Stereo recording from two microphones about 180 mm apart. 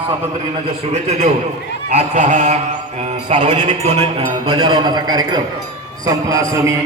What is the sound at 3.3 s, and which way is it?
A man's voice, 40° right (ahead or behind).